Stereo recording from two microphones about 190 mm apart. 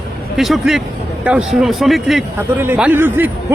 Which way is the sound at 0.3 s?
Centre (ahead or behind).